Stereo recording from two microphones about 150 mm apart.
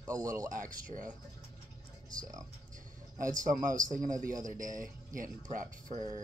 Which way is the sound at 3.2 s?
60° right (ahead or behind).